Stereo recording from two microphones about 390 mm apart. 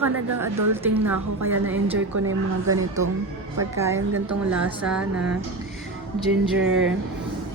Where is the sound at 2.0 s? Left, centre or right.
Right.